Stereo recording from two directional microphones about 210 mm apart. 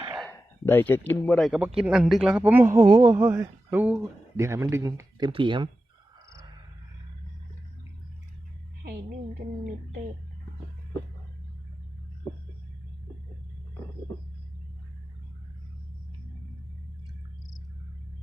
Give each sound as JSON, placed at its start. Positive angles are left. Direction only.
{"t": 0.3, "sound": "speech", "side_deg": 10}
{"t": 8.8, "sound": "speech", "side_deg": -50}